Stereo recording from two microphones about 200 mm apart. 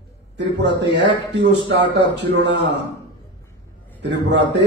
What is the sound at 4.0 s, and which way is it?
Speech, 60° right (ahead or behind).